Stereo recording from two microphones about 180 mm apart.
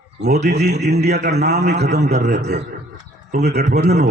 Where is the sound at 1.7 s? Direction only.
65° right (ahead or behind).